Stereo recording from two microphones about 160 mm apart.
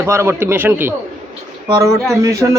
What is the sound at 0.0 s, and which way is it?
Speech, 15° right (ahead or behind).